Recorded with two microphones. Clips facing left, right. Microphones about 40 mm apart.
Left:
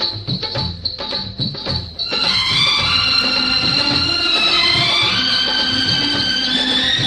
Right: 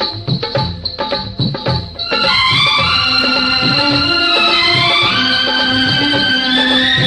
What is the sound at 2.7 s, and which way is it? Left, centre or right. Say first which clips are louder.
Music: right 4 dB; centre.